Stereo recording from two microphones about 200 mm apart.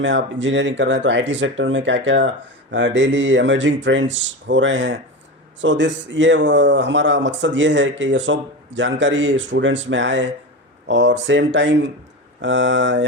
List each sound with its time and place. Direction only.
0.0 s speech: 65° right (ahead or behind)